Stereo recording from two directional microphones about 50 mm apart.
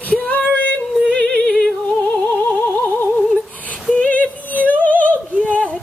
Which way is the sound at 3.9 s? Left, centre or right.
Left.